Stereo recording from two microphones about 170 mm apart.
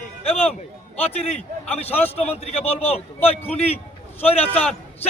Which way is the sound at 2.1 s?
40° left (ahead or behind).